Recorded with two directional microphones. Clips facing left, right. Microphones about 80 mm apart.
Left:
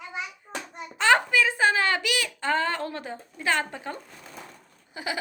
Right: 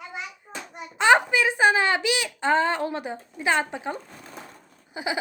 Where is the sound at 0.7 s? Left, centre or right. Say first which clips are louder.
Right 3 dB; centre.